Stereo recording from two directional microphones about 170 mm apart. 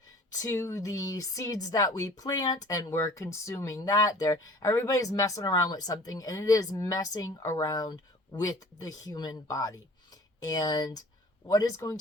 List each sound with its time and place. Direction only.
0.3 s a woman's voice: 20° left (ahead or behind)